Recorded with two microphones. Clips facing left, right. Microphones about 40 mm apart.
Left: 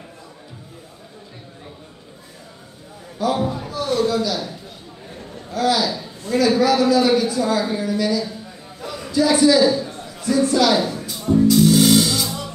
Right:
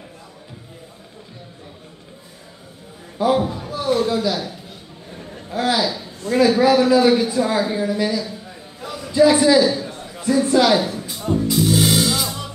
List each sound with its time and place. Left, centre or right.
3.2 s a man's voice: right
3.4 s a man's voice: centre
3.7 s a man's voice: centre
5.3 s a sound: right
5.9 s a man's voice: centre
8.2 s a sound: centre
9.1 s a man's voice: right
10.8 s music: centre